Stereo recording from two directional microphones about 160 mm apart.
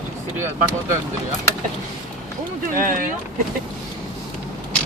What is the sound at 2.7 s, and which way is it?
Speech, 60° right (ahead or behind).